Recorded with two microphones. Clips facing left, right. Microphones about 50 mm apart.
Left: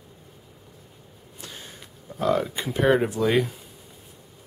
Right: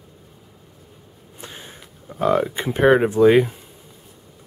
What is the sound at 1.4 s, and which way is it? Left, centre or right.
Speech, right.